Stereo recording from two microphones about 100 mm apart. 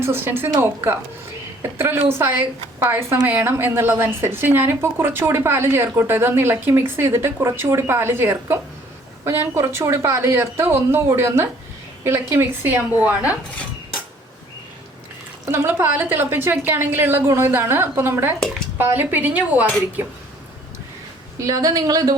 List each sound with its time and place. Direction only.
0.0 s a woman's voice: 25° right (ahead or behind)
1.8 s a woman's voice: 25° right (ahead or behind)
15.4 s a woman's voice: 20° right (ahead or behind)
21.3 s speech: 35° right (ahead or behind)